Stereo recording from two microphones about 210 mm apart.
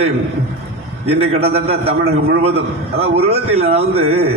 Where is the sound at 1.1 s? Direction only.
30° right (ahead or behind).